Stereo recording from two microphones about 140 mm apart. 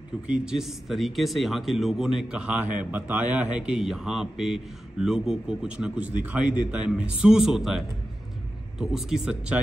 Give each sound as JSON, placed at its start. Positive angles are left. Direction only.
{"t": 0.3, "sound": "speech", "side_deg": -5}